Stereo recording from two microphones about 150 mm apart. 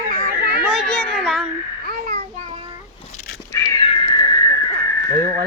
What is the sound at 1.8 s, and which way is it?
Babbling, 80° right.